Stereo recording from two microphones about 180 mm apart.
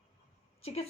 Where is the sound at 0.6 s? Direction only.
35° left (ahead or behind).